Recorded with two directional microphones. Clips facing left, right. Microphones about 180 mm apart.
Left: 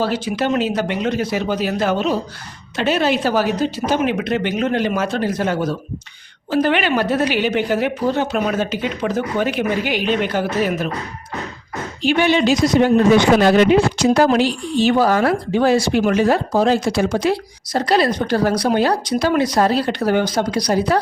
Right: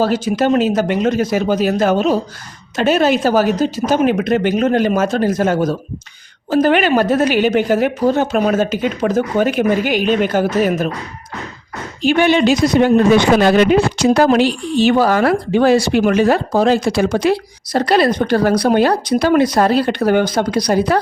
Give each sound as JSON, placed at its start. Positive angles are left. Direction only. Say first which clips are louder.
{"t": 0.0, "sound": "a woman's voice", "louder": "right 5 dB", "side_deg": -45}
{"t": 12.0, "sound": "a woman's voice", "louder": "right 3 dB", "side_deg": -50}